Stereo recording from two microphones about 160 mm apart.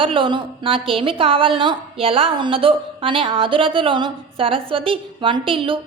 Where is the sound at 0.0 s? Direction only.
35° right (ahead or behind).